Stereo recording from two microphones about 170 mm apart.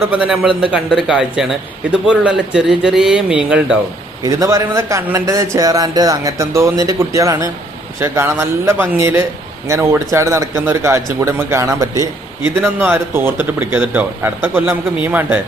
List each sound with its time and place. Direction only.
0.1 s speech: 5° right (ahead or behind)
4.2 s speech: 20° right (ahead or behind)